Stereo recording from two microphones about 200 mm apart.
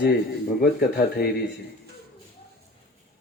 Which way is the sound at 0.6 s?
50° left (ahead or behind).